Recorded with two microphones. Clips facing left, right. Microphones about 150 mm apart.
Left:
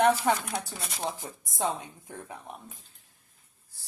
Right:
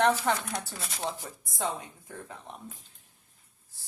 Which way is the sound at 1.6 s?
20° left (ahead or behind).